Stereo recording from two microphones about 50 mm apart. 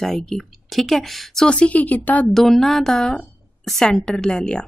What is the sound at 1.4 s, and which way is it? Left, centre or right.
Speech, left.